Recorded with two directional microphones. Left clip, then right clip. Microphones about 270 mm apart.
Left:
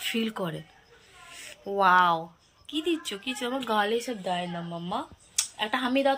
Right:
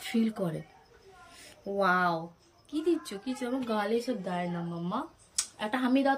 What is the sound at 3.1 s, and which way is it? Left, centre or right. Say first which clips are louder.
Speech: left 4 dB; centre.